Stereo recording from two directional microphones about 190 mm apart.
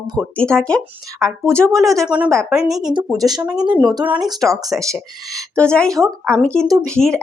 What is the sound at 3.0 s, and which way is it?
Speech, 15° right (ahead or behind).